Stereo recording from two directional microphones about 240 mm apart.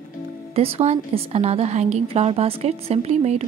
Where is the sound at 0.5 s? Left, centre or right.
Right.